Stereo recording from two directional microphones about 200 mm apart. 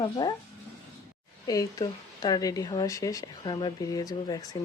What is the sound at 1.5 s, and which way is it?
Speech, 20° left (ahead or behind).